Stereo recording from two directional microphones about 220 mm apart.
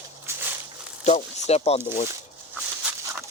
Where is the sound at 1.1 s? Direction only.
30° left (ahead or behind).